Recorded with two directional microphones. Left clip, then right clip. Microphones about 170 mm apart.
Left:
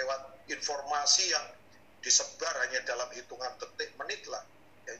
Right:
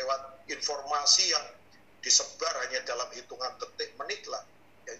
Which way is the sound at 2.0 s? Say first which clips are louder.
Right 2 dB; 20° right (ahead or behind).